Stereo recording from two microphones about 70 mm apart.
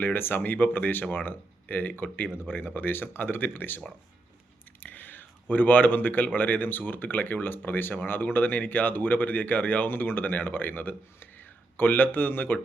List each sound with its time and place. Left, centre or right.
0.0 s speech: left